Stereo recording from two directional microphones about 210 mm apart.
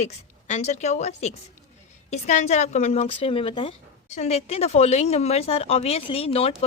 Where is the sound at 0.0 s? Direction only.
35° left (ahead or behind).